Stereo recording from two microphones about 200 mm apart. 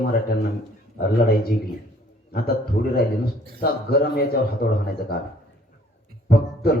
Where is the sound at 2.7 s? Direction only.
55° left (ahead or behind).